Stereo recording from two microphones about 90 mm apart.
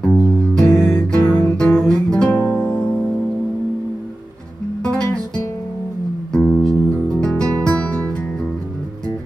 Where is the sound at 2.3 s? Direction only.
25° left (ahead or behind).